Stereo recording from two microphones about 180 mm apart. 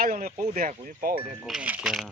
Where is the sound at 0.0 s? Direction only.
55° right (ahead or behind).